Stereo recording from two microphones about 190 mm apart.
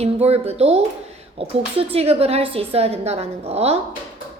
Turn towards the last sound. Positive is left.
turn(degrees=-35)  # may be behind; listen again after turning